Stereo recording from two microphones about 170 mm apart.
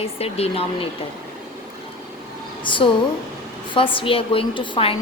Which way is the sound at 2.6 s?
30° left (ahead or behind).